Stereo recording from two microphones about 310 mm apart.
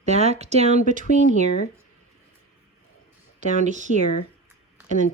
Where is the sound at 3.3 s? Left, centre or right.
Right.